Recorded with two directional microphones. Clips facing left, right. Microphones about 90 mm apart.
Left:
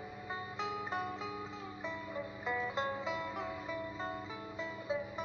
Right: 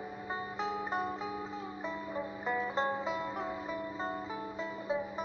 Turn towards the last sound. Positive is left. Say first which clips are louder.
# right 3 dB
turn(degrees=-30)  # may be behind; listen again after turning